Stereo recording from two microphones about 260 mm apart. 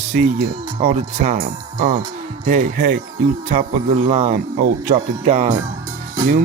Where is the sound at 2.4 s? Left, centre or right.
Right.